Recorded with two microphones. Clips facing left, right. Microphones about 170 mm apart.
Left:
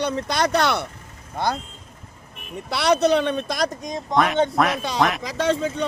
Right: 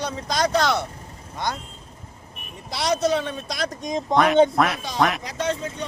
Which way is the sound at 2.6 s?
65° left (ahead or behind).